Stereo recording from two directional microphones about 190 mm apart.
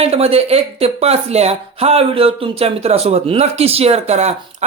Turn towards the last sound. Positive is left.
turn(degrees=-35)  # may be behind; listen again after turning